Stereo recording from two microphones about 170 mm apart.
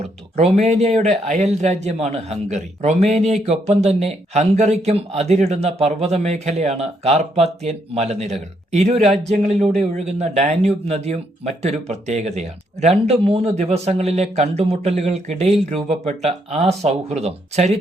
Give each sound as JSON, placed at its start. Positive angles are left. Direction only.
{"t": 0.0, "sound": "speech", "side_deg": -40}